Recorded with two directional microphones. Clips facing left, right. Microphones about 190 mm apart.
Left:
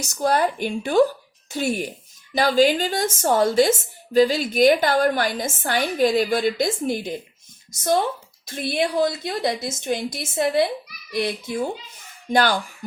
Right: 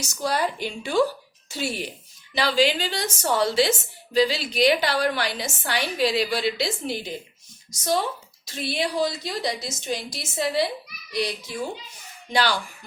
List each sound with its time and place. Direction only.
0.1 s a child's voice: 50° left (ahead or behind)